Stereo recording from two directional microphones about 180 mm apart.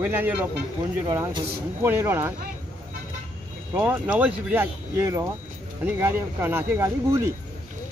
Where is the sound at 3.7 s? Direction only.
10° right (ahead or behind).